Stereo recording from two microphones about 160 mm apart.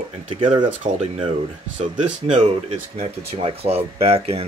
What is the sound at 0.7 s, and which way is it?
Speech, 50° right (ahead or behind).